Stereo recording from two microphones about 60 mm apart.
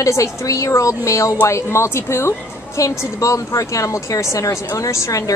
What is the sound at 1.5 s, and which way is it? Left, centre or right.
Speech, left.